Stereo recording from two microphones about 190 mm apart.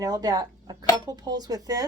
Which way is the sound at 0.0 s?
20° right (ahead or behind).